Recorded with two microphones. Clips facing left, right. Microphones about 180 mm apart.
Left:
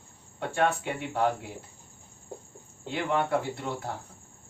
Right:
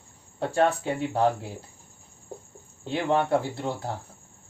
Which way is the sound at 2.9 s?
30° right (ahead or behind).